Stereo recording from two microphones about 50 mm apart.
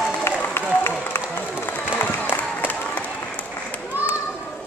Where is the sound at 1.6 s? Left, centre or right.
Left.